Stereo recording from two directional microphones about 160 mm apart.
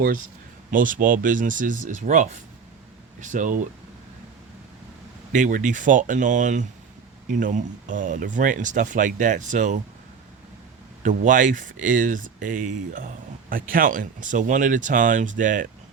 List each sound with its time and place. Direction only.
0.7 s speech: 55° right (ahead or behind)
5.3 s speech: 55° right (ahead or behind)
11.0 s speech: 55° right (ahead or behind)